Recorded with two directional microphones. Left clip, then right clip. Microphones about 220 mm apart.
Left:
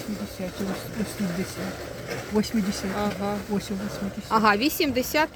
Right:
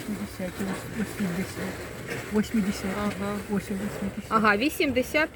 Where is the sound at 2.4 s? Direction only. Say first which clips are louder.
Left 2 dB; 10° left (ahead or behind).